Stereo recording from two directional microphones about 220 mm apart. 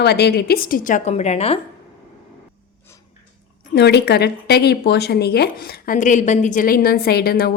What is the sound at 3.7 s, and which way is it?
A woman's voice, 50° left (ahead or behind).